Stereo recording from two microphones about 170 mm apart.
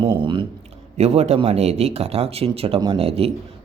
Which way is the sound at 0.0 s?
30° right (ahead or behind).